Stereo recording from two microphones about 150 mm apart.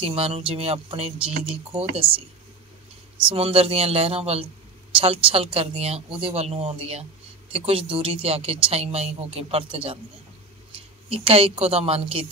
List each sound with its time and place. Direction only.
0.0 s speech: 40° right (ahead or behind)
3.3 s a woman's voice: 40° right (ahead or behind)